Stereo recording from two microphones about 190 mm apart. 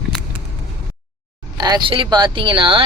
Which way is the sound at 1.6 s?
20° right (ahead or behind).